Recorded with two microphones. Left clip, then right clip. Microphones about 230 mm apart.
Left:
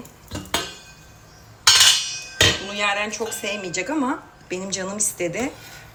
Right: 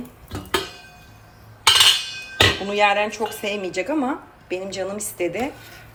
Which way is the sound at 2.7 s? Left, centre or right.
Centre.